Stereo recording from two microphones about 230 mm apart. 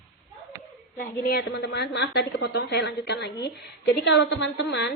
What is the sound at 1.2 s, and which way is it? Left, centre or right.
Speech, left.